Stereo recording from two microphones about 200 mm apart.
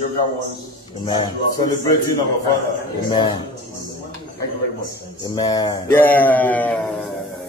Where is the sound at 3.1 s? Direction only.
25° left (ahead or behind).